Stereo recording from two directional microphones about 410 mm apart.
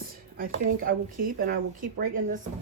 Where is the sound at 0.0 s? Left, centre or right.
Right.